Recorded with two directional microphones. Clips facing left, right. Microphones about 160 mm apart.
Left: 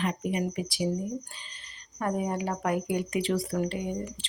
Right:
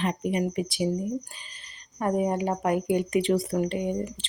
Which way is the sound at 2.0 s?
20° right (ahead or behind).